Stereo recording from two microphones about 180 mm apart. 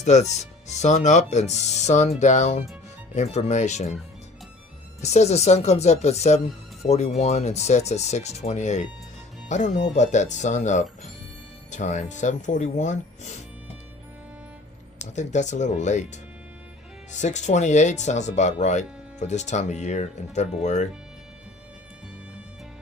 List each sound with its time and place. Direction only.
0.0 s speech: 40° left (ahead or behind)
5.0 s speech: 40° left (ahead or behind)
14.9 s speech: 40° left (ahead or behind)
17.1 s speech: 40° left (ahead or behind)